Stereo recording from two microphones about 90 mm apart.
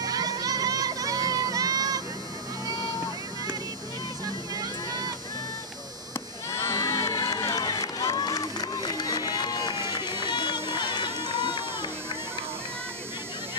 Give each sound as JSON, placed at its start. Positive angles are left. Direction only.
{"t": 0.0, "sound": "crowd", "side_deg": -45}
{"t": 6.5, "sound": "crowd", "side_deg": 35}